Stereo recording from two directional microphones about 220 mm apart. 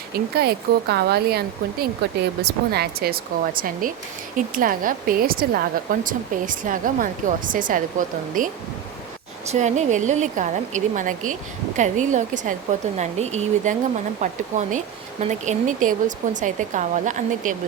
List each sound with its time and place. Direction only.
0.3 s speech: 45° right (ahead or behind)
9.5 s speech: 30° right (ahead or behind)